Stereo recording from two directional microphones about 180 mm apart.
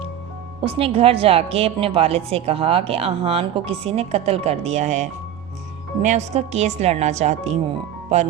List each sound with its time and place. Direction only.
0.6 s a woman's voice: 30° right (ahead or behind)